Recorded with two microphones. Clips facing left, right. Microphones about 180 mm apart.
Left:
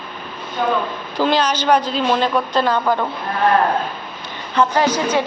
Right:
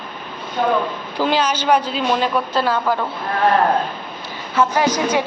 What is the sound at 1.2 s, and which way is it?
A woman's voice, 10° right (ahead or behind).